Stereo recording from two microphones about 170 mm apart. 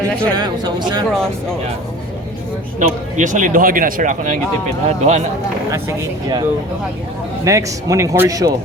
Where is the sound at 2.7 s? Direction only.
45° right (ahead or behind).